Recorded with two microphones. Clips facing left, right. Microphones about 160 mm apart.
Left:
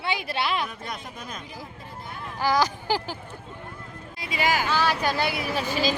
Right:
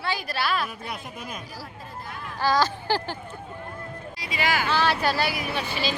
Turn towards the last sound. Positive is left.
turn(degrees=40)  # may be behind; listen again after turning